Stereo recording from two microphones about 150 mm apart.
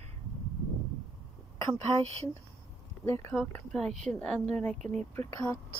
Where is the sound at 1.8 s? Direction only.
45° right (ahead or behind).